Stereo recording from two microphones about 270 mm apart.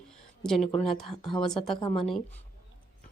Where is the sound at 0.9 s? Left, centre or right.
Centre.